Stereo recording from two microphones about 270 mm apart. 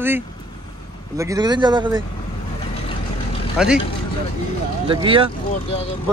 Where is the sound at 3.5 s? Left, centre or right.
Centre.